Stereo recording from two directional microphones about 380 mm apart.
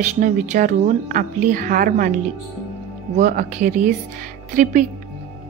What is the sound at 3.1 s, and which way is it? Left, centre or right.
A woman's voice, centre.